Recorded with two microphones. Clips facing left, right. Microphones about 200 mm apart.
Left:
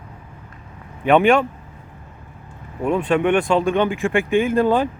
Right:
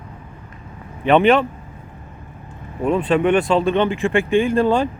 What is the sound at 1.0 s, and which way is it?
Speech, 10° left (ahead or behind).